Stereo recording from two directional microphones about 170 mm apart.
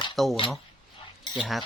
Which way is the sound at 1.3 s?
5° right (ahead or behind).